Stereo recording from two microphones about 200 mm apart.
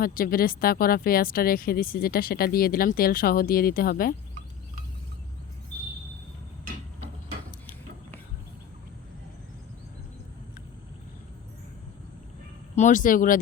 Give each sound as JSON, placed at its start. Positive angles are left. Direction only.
{"t": 0.0, "sound": "speech", "side_deg": 45}
{"t": 12.7, "sound": "speech", "side_deg": 40}